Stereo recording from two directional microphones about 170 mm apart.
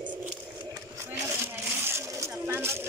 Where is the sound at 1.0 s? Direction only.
15° right (ahead or behind).